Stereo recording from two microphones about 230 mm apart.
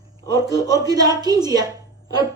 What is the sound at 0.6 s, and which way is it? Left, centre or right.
A woman's voice, centre.